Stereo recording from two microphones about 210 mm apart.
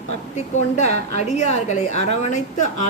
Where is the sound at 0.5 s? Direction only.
35° left (ahead or behind).